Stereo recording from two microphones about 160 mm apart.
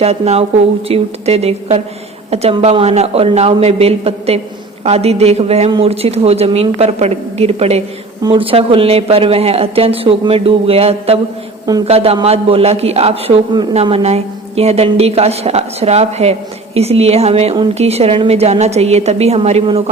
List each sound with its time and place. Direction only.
0.0 s a woman's voice: 40° right (ahead or behind)